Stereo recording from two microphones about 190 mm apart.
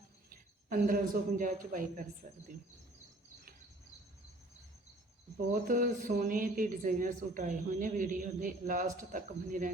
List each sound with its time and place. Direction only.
0.3 s speech: 45° right (ahead or behind)
5.5 s speech: 45° right (ahead or behind)